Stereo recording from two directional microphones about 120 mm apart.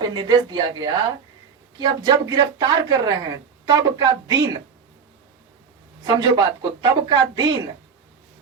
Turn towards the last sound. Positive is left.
turn(degrees=-40)  # may be behind; listen again after turning